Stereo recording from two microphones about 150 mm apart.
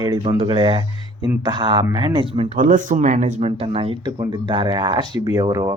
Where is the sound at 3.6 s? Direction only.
40° right (ahead or behind).